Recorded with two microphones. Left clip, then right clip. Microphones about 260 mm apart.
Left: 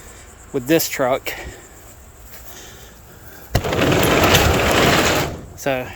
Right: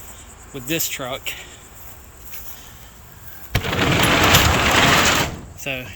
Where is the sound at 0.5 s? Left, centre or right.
Centre.